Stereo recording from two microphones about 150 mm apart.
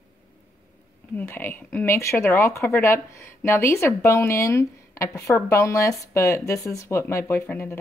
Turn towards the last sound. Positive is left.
turn(degrees=15)  # may be behind; listen again after turning